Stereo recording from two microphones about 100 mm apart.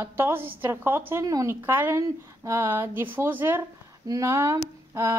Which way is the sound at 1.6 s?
20° right (ahead or behind).